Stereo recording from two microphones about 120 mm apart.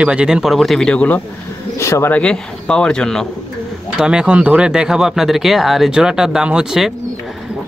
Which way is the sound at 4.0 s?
5° right (ahead or behind).